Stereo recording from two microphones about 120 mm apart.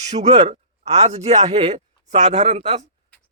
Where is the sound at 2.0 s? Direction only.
85° right.